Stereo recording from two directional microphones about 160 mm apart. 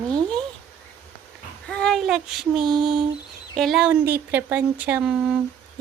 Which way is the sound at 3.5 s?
Centre (ahead or behind).